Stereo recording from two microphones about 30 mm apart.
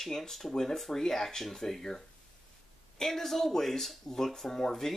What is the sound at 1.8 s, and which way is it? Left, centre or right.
Speech, left.